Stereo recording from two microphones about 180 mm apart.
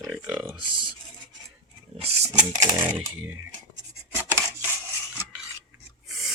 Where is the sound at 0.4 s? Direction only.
30° right (ahead or behind).